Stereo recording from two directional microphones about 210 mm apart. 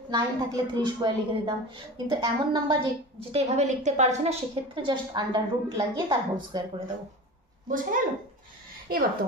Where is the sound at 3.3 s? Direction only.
35° right (ahead or behind).